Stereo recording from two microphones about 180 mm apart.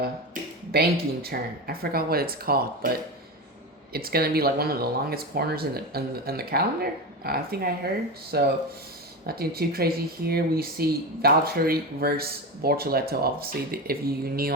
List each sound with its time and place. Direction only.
0.7 s speech: 60° right (ahead or behind)